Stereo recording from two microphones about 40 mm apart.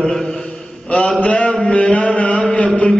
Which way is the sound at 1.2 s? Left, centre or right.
Left.